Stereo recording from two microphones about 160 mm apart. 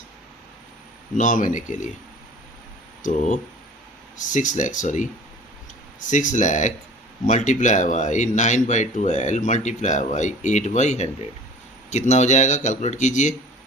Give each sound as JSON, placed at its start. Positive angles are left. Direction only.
{"t": 1.1, "sound": "speech", "side_deg": 50}
{"t": 3.0, "sound": "speech", "side_deg": 55}